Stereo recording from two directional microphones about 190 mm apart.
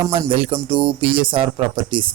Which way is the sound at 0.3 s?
30° right (ahead or behind).